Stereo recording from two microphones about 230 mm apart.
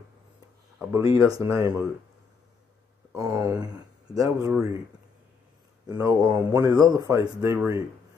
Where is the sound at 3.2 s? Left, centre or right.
Centre.